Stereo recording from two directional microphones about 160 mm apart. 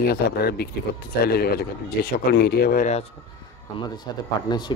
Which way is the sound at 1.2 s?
75° left (ahead or behind).